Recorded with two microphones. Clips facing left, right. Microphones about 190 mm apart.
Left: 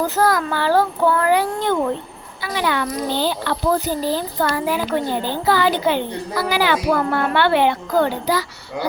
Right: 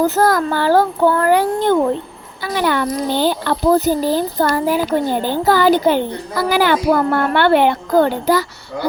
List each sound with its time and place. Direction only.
0.0 s a child's voice: 45° right (ahead or behind)